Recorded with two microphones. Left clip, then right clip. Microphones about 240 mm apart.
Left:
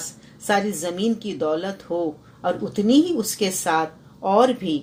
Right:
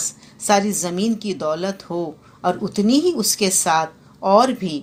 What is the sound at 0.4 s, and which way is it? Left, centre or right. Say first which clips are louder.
A woman's voice: right 4 dB; right.